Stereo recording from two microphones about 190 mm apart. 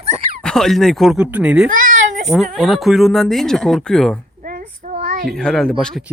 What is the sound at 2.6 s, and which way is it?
Speech, centre (ahead or behind).